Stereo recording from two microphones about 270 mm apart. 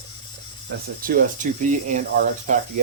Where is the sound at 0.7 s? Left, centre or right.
Right.